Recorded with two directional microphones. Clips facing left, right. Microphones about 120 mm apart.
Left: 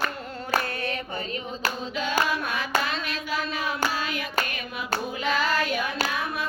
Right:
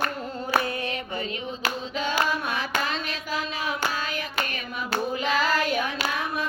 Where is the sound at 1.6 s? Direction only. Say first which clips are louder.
Right 1 dB; 40° left (ahead or behind).